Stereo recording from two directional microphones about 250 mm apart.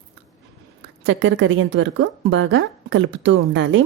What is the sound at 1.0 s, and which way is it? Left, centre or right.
A woman's voice, right.